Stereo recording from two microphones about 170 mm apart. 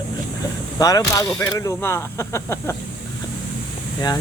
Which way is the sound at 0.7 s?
20° left (ahead or behind).